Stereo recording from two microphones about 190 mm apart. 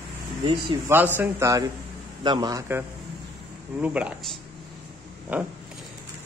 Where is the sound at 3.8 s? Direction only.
5° right (ahead or behind).